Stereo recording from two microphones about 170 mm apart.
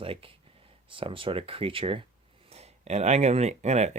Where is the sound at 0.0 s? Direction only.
30° right (ahead or behind).